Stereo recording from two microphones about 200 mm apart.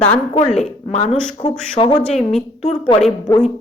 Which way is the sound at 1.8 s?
30° left (ahead or behind).